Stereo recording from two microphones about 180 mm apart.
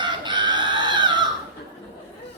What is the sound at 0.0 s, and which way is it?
Chicken, 25° right (ahead or behind).